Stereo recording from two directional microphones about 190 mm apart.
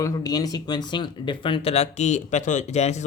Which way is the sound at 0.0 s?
20° left (ahead or behind).